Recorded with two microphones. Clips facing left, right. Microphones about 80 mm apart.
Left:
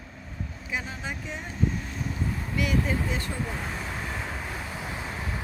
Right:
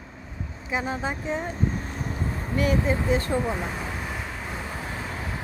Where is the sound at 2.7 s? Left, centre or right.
Right.